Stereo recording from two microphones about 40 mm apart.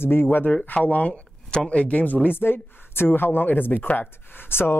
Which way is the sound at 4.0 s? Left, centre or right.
Left.